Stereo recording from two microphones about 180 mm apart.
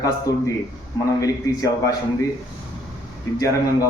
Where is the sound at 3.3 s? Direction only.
15° left (ahead or behind).